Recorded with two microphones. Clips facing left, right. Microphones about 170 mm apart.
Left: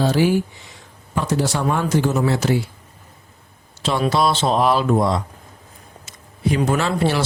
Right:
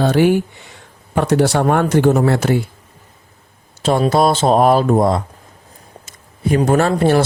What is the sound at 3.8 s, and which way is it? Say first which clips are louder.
Speech: right 5 dB; 45° right (ahead or behind).